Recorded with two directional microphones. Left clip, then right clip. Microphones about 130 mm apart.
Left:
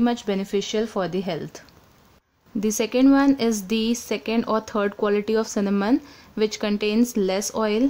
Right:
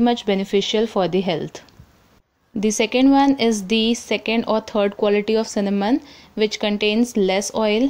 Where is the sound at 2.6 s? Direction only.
5° right (ahead or behind).